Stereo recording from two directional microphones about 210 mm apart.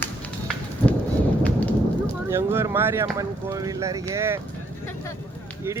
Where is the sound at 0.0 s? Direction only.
5° left (ahead or behind).